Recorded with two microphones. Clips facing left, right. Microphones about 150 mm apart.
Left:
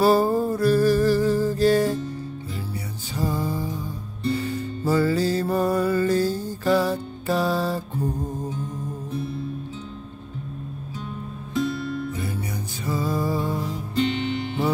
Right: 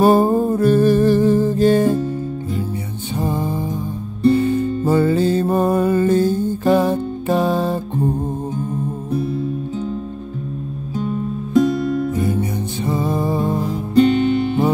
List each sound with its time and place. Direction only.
0.0 s music: 20° right (ahead or behind)
3.2 s music: 20° right (ahead or behind)
4.8 s music: 25° right (ahead or behind)
11.5 s music: 45° right (ahead or behind)
12.3 s music: 25° right (ahead or behind)
13.4 s music: 45° right (ahead or behind)